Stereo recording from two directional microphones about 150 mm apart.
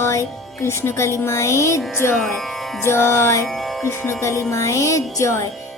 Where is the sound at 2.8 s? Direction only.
15° left (ahead or behind).